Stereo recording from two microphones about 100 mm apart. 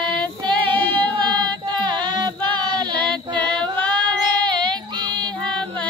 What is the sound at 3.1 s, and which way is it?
Female singing, 15° left (ahead or behind).